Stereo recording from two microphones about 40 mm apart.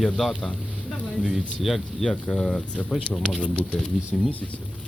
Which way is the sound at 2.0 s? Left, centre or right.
Centre.